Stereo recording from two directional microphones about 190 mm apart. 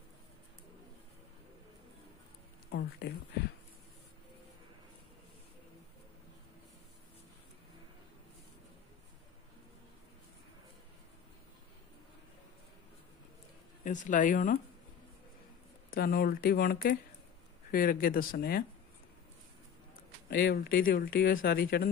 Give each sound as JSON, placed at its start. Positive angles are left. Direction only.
{"t": 2.7, "sound": "speech", "side_deg": 55}
{"t": 13.8, "sound": "speech", "side_deg": 40}
{"t": 15.9, "sound": "speech", "side_deg": 50}
{"t": 20.2, "sound": "speech", "side_deg": 55}